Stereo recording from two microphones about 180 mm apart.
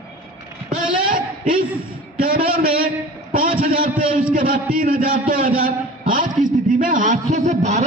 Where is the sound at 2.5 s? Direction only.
55° right (ahead or behind).